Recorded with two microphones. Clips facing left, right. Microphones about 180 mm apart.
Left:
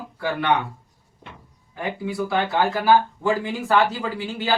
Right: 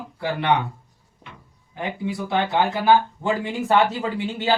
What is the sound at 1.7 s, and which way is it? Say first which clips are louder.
Speech: left 1 dB; 20° right (ahead or behind).